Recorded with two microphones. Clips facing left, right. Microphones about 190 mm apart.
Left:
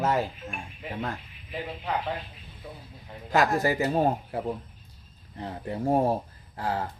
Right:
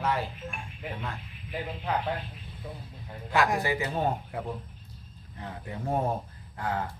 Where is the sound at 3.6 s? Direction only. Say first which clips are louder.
Left 5 dB; 40° left (ahead or behind).